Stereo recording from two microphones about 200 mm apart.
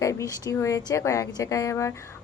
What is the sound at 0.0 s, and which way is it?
A woman's voice, 15° left (ahead or behind).